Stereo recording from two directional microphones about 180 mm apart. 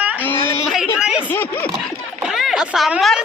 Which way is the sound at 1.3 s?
10° left (ahead or behind).